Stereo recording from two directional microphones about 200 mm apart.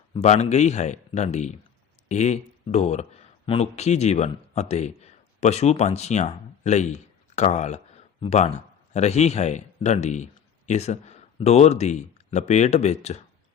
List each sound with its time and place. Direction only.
0.1 s a man's voice: 35° left (ahead or behind)